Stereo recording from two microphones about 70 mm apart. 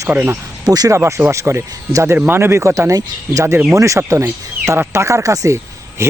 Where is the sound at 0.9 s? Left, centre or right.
Right.